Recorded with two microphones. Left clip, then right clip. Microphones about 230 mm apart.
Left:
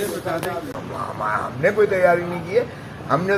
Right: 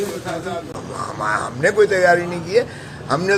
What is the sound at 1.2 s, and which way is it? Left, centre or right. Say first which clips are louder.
A man's voice: right 2 dB; right.